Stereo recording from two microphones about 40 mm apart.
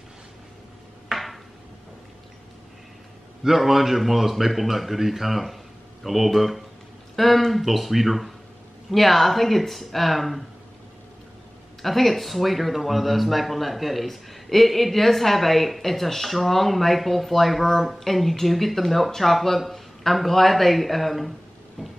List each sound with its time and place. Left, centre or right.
1.1 s a sound: centre
3.4 s speech: centre
11.8 s speech: centre